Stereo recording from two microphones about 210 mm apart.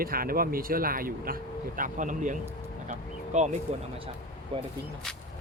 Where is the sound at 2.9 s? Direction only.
35° right (ahead or behind).